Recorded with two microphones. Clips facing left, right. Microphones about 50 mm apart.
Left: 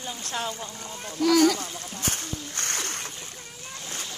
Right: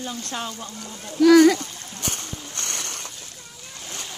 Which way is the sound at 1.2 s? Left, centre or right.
Right.